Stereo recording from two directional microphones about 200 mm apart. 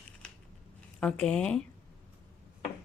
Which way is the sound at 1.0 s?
5° left (ahead or behind).